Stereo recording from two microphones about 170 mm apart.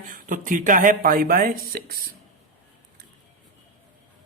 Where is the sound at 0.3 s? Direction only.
50° right (ahead or behind).